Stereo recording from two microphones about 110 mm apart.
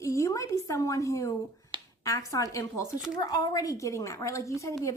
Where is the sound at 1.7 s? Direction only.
45° right (ahead or behind).